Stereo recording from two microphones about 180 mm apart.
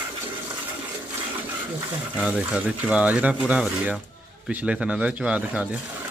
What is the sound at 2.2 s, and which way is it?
Speech, 5° right (ahead or behind).